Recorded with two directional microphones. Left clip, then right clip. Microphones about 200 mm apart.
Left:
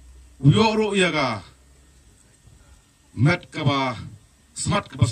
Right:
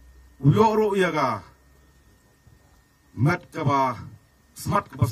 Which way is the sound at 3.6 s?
40° left (ahead or behind).